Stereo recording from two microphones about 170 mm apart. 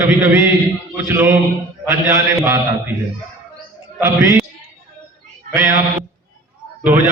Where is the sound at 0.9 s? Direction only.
10° right (ahead or behind).